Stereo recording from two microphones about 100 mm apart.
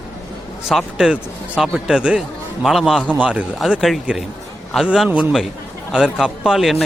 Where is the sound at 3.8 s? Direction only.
Centre (ahead or behind).